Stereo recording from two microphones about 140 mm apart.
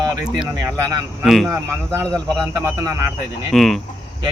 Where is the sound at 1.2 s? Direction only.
Centre (ahead or behind).